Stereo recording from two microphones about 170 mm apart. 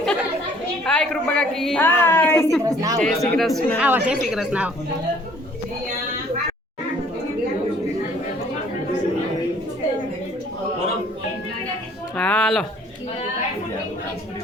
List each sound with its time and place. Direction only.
0.9 s a woman's voice: 5° left (ahead or behind)
2.6 s speech: 20° right (ahead or behind)
3.0 s a woman's voice: 5° left (ahead or behind)
12.1 s a sound: 5° left (ahead or behind)